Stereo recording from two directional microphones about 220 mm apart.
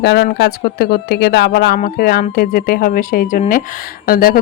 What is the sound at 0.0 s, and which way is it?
Speech, 50° left (ahead or behind).